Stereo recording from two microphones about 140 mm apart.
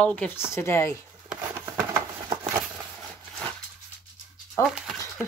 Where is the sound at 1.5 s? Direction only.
15° right (ahead or behind).